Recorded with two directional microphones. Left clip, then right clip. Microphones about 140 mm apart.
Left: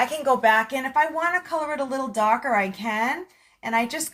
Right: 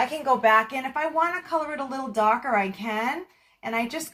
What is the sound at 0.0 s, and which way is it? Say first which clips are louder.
Speech: left 2 dB; 25° left (ahead or behind).